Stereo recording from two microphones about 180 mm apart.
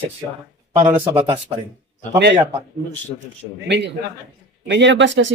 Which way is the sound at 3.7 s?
75° right (ahead or behind).